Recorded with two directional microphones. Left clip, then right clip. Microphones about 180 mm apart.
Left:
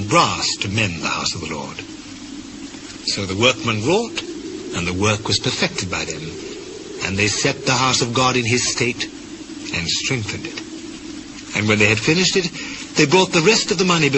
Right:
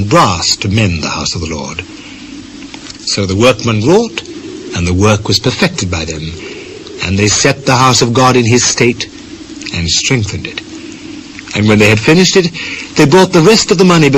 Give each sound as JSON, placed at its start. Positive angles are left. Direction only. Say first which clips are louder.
{"t": 0.1, "sound": "speech", "louder": "right 7 dB", "side_deg": 20}
{"t": 3.2, "sound": "speech", "louder": "right 8 dB", "side_deg": 20}